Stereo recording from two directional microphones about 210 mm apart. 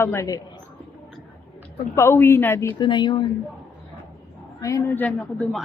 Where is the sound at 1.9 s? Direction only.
10° left (ahead or behind).